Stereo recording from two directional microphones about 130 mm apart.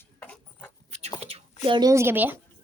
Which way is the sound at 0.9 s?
60° right (ahead or behind).